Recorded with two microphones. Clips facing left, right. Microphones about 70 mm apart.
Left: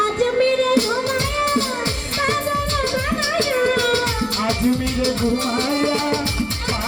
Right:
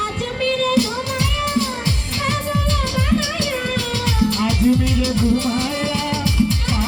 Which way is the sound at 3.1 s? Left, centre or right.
Left.